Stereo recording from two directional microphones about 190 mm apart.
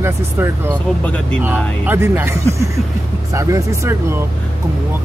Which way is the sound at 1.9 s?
10° right (ahead or behind).